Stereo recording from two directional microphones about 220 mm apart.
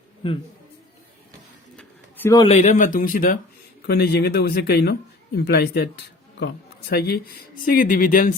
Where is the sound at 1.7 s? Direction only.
10° left (ahead or behind).